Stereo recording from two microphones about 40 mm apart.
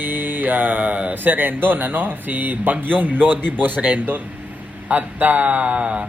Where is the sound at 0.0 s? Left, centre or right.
Right.